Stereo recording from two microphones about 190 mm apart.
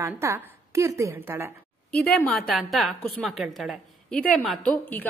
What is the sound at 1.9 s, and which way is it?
A woman's voice, 5° left (ahead or behind).